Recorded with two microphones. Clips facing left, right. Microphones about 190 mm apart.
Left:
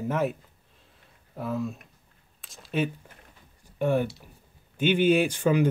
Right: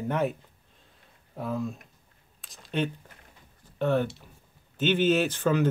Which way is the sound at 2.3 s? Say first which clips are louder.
Left 1 dB; centre (ahead or behind).